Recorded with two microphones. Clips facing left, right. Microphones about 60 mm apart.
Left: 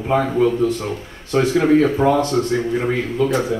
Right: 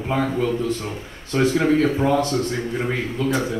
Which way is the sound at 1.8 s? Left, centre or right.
Left.